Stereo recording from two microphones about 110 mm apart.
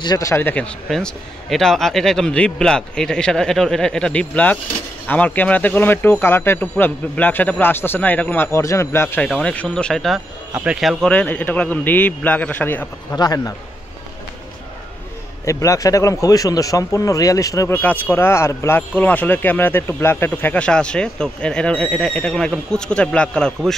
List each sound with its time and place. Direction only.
0.0 s a man's voice: 40° left (ahead or behind)
0.3 s speech: 20° left (ahead or behind); by 11.1 s centre (ahead or behind)
11.1 s speech: 10° left (ahead or behind)
13.1 s a man's voice: 35° left (ahead or behind)
15.4 s a man's voice: 30° left (ahead or behind)
17.7 s speech: 15° left (ahead or behind)